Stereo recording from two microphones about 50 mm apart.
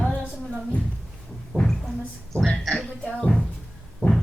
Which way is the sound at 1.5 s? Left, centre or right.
Left.